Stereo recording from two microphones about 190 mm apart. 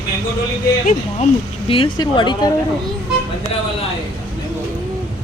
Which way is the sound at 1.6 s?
25° left (ahead or behind).